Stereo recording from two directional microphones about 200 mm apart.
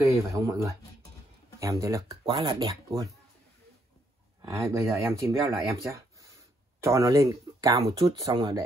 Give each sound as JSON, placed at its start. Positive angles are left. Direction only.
{"t": 0.0, "sound": "speech", "side_deg": -15}
{"t": 4.7, "sound": "speech", "side_deg": -15}